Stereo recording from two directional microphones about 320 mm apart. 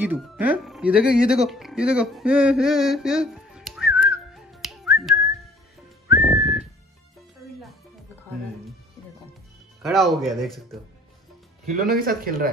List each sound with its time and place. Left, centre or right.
0.0 s speech: centre
6.2 s whistling: centre
9.8 s speech: centre
11.8 s speech: right